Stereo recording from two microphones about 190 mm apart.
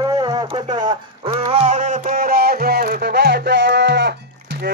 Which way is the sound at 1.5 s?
35° right (ahead or behind).